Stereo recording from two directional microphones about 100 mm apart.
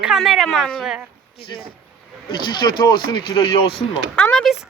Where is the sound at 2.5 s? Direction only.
50° left (ahead or behind).